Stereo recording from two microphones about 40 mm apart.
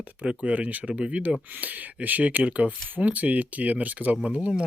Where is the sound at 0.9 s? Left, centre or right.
Right.